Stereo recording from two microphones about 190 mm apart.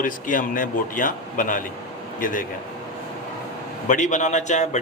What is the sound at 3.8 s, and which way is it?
Speech, 40° left (ahead or behind).